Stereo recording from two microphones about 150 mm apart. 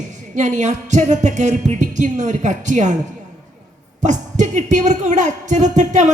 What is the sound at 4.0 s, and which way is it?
A woman's voice, 55° right (ahead or behind).